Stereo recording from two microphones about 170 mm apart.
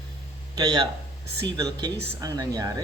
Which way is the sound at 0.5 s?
25° right (ahead or behind).